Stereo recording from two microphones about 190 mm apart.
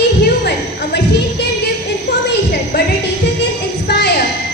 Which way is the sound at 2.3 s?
55° left (ahead or behind).